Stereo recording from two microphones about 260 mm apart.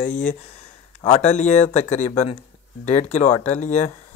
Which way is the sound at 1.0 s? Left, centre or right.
Left.